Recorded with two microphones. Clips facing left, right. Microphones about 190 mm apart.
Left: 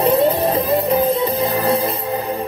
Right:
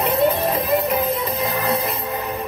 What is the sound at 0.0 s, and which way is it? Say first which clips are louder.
Music: left 4 dB; 30° left (ahead or behind).